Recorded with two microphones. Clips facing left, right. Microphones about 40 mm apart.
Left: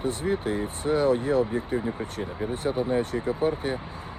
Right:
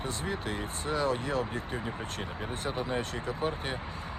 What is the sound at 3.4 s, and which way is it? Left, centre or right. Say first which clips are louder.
Speech: left 7 dB; right.